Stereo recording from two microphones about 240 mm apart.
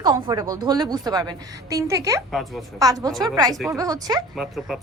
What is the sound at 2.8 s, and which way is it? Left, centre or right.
Speech, centre.